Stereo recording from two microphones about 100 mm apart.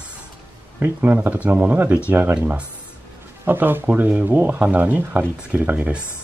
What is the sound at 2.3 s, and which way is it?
Speech, 10° right (ahead or behind).